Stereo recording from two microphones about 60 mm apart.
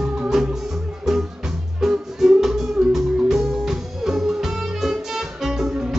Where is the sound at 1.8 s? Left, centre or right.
Centre.